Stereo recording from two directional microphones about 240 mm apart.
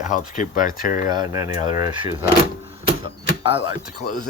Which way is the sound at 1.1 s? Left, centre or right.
Centre.